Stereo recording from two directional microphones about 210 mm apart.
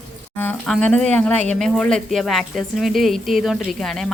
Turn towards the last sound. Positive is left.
turn(degrees=0)  # may be behind; listen again after turning